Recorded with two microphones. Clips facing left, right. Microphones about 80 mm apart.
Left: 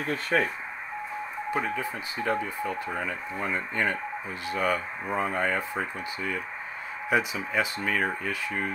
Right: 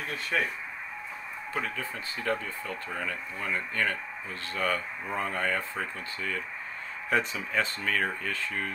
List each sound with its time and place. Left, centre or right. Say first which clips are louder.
0.1 s speech: left 5 dB; left
1.5 s speech: left 4 dB; centre